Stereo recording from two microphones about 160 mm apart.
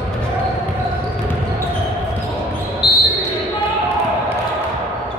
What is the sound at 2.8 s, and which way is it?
Basketball bounce, 30° left (ahead or behind).